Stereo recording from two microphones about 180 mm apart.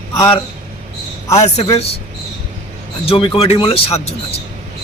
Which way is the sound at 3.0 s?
30° left (ahead or behind).